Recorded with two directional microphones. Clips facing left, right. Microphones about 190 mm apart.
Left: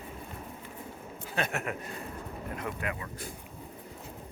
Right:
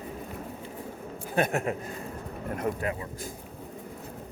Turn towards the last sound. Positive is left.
turn(degrees=-40)  # may be behind; listen again after turning